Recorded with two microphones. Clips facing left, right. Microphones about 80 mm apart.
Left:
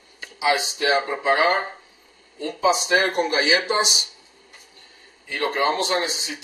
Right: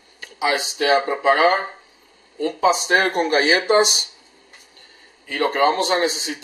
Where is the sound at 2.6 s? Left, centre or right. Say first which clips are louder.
Right 2 dB; right.